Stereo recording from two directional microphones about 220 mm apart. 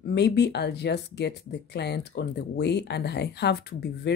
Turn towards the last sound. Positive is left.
turn(degrees=50)  # may be behind; listen again after turning